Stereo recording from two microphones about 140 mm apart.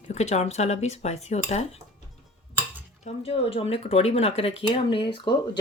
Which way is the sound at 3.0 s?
45° left (ahead or behind).